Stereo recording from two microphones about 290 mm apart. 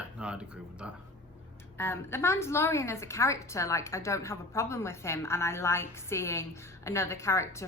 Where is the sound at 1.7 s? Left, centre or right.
Centre.